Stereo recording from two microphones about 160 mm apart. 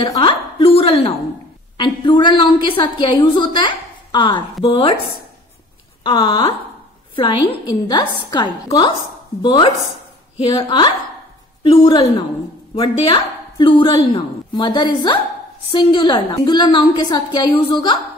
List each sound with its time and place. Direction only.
0.0 s a sound: 30° left (ahead or behind)
1.8 s a woman's voice: 30° left (ahead or behind)
6.0 s a woman's voice: 30° left (ahead or behind)